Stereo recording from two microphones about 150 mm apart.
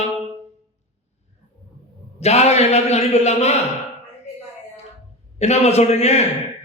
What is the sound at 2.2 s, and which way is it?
A man's voice, 45° left (ahead or behind).